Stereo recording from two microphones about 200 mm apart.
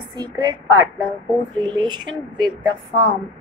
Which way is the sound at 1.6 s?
20° right (ahead or behind).